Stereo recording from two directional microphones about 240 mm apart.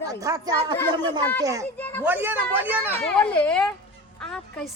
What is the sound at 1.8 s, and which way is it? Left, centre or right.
Speech, centre.